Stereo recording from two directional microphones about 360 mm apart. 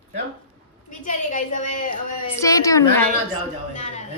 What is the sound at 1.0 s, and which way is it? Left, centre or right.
Speech, left.